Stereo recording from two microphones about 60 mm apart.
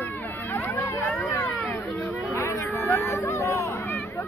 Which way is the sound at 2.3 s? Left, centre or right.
Left.